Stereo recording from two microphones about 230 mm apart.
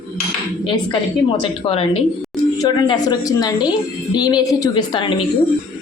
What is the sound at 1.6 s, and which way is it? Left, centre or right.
A woman's voice, left.